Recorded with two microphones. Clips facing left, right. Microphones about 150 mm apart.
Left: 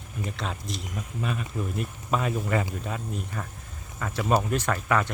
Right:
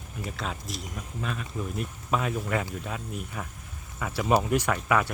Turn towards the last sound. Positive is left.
turn(degrees=-10)  # may be behind; listen again after turning